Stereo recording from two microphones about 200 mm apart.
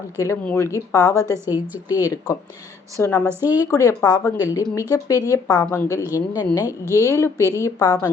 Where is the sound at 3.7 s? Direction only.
15° left (ahead or behind).